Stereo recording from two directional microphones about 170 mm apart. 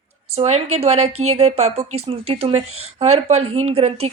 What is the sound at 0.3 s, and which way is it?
A woman's voice, 40° right (ahead or behind).